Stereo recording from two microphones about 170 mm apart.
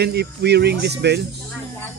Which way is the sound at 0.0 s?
75° right (ahead or behind).